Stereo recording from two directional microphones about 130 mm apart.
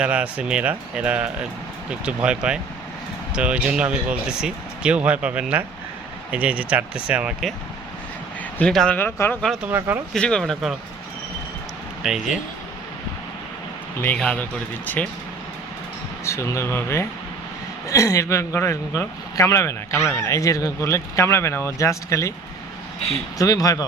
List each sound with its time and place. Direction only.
0.0 s speech: 10° right (ahead or behind)
8.5 s speech: 5° left (ahead or behind)
9.0 s speech: 15° left (ahead or behind)
9.6 s speech: 15° right (ahead or behind)
10.2 s speech: 5° left (ahead or behind)
12.0 s speech: centre (ahead or behind)
14.0 s speech: 10° left (ahead or behind)
16.2 s a man's voice: 20° left (ahead or behind)
23.4 s a man's voice: 30° left (ahead or behind)